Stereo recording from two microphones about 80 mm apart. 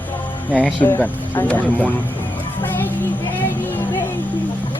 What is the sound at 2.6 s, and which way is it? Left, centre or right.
Music, left.